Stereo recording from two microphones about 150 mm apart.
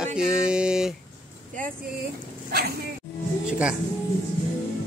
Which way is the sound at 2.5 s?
90° right.